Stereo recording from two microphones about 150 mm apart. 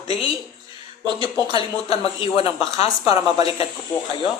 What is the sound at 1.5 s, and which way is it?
Speech, 35° left (ahead or behind).